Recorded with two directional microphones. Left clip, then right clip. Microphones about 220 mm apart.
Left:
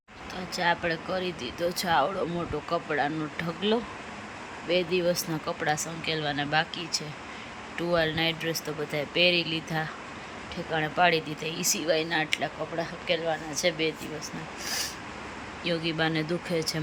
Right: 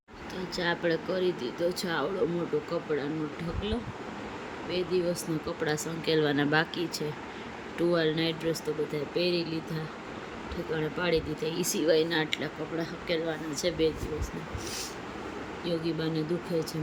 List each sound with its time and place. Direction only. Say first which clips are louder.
0.5 s speech: left 2 dB; 5° right (ahead or behind)
3.6 s speech: left 9 dB; 20° left (ahead or behind)
5.6 s speech: left 1 dB; 5° right (ahead or behind)
10.8 s speech: left 6 dB; centre (ahead or behind)
15.8 s speech: left 4 dB; centre (ahead or behind)